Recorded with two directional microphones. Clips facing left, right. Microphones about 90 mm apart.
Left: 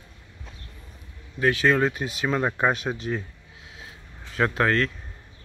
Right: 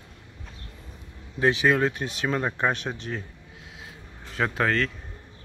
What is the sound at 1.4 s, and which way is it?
Speech, 20° right (ahead or behind).